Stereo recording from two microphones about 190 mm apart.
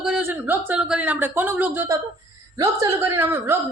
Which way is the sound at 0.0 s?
5° right (ahead or behind).